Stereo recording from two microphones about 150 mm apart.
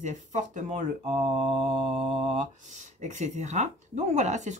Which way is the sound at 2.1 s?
35° right (ahead or behind).